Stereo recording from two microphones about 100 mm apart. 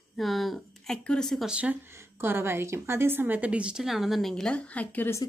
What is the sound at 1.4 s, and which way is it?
Speech, 10° right (ahead or behind).